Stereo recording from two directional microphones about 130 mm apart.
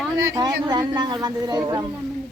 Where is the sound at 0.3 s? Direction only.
30° right (ahead or behind).